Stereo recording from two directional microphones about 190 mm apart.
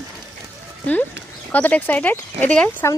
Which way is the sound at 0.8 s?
10° left (ahead or behind).